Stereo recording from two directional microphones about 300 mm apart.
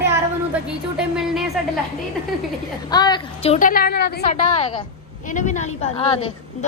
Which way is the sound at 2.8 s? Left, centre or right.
Centre.